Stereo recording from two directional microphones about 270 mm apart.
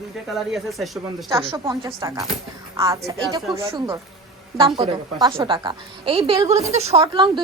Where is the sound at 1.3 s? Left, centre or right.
Centre.